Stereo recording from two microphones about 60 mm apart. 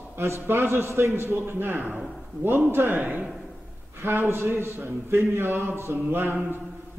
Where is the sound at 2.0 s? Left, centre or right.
Centre.